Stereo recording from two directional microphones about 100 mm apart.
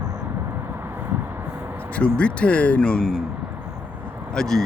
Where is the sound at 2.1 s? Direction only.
10° left (ahead or behind).